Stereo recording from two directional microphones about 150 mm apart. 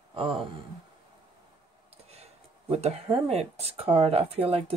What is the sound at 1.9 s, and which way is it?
Speech, 45° right (ahead or behind).